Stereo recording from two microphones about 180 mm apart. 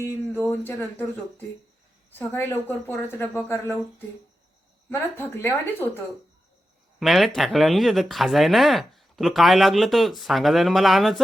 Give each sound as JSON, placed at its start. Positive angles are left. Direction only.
{"t": 0.4, "sound": "a woman's voice", "side_deg": 10}
{"t": 2.0, "sound": "a woman's voice", "side_deg": 10}
{"t": 4.9, "sound": "a woman's voice", "side_deg": 10}
{"t": 7.0, "sound": "speech", "side_deg": 0}